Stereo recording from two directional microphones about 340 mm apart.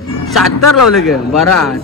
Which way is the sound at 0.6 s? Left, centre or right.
Left.